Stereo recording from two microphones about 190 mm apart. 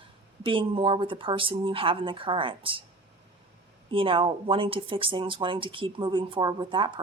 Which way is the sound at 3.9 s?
30° right (ahead or behind).